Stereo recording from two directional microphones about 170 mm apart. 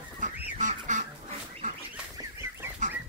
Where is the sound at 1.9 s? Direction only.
15° right (ahead or behind).